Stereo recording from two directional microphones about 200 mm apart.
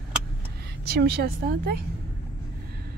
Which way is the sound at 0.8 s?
50° right (ahead or behind).